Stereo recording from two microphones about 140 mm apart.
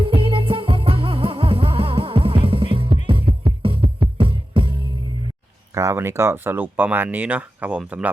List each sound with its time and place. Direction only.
0.0 s music: 40° right (ahead or behind)
5.7 s speech: 20° right (ahead or behind)